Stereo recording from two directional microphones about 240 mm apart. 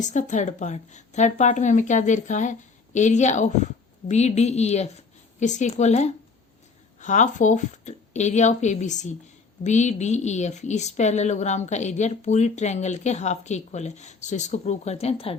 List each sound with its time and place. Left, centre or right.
0.0 s speech: left